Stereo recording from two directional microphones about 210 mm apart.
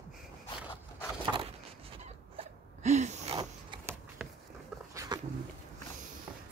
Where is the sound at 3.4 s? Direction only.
20° right (ahead or behind).